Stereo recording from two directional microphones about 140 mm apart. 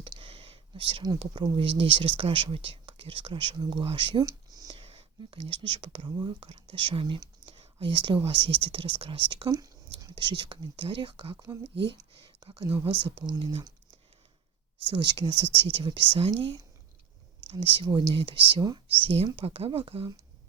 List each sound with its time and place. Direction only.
0.0 s a sound: 35° right (ahead or behind)
1.8 s speech: 40° right (ahead or behind)
4.8 s speech: 45° right (ahead or behind)
6.4 s speech: 45° right (ahead or behind)
14.8 s speech: 35° right (ahead or behind)
17.7 s speech: 35° right (ahead or behind)